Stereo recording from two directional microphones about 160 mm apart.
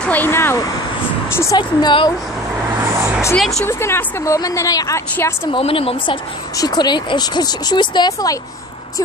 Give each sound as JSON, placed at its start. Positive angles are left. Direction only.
{"t": 0.0, "sound": "a woman's voice", "side_deg": 10}
{"t": 1.6, "sound": "speech", "side_deg": 30}
{"t": 2.8, "sound": "vehicle", "side_deg": -15}
{"t": 3.3, "sound": "speech", "side_deg": 0}
{"t": 3.6, "sound": "a woman's voice", "side_deg": 15}
{"t": 5.5, "sound": "a woman's voice", "side_deg": 35}